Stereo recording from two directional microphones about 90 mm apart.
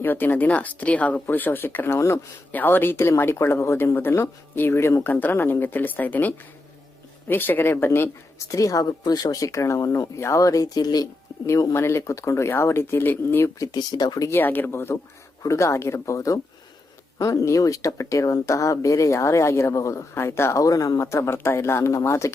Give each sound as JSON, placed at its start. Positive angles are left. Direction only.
{"t": 0.0, "sound": "speech", "side_deg": 20}
{"t": 2.5, "sound": "speech", "side_deg": 20}
{"t": 11.4, "sound": "speech", "side_deg": 35}
{"t": 13.6, "sound": "speech", "side_deg": 45}
{"t": 14.3, "sound": "speech", "side_deg": 20}